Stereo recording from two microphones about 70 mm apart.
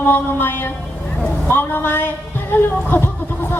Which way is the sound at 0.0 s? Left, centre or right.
Left.